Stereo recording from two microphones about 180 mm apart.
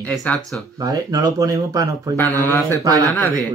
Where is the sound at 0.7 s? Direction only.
20° right (ahead or behind).